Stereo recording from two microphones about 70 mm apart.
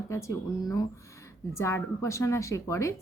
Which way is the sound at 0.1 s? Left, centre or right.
Left.